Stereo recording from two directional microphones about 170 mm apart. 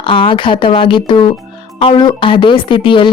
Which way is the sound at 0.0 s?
30° left (ahead or behind).